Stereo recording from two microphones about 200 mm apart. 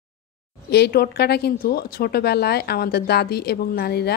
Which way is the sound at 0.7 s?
55° left (ahead or behind).